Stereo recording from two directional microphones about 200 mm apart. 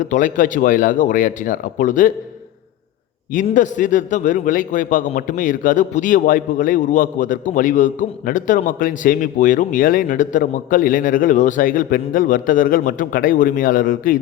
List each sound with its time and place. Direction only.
0.0 s a man's voice: 40° left (ahead or behind)
3.3 s a man's voice: 40° left (ahead or behind)